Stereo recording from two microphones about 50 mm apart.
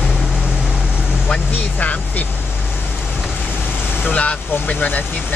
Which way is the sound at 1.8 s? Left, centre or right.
Left.